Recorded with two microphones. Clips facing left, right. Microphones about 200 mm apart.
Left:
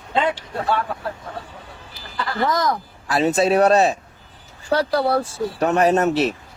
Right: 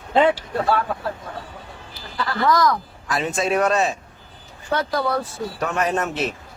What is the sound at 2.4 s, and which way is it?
Speech, 25° left (ahead or behind).